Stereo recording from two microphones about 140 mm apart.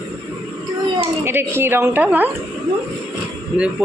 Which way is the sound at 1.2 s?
15° right (ahead or behind).